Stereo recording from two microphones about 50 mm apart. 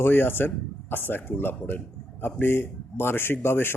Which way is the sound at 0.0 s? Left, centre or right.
Left.